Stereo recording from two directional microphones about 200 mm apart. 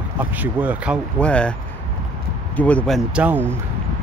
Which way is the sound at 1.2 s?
5° left (ahead or behind).